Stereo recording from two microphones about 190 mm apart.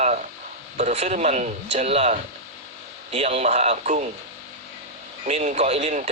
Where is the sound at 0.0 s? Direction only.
40° right (ahead or behind).